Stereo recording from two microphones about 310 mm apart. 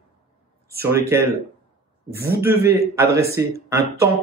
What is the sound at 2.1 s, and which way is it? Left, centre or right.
Speech, right.